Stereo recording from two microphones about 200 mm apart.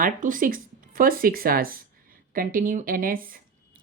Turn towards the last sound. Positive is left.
turn(degrees=-45)  # may be behind; listen again after turning